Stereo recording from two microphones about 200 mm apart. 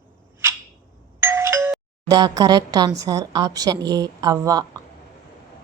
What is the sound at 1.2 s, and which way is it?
Speech, 15° right (ahead or behind).